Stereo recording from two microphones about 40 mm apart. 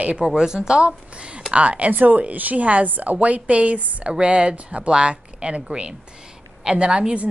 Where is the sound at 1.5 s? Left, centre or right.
Right.